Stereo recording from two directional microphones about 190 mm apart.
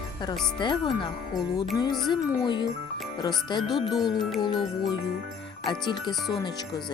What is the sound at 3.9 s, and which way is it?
Music, centre (ahead or behind).